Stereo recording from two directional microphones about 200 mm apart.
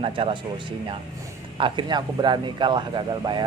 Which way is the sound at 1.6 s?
20° right (ahead or behind).